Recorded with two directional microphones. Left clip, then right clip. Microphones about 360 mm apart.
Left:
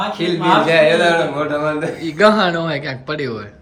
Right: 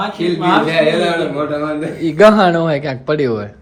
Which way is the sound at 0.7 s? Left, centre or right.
Centre.